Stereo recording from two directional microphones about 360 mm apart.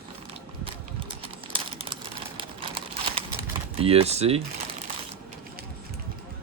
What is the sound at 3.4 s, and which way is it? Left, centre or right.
Typing, centre.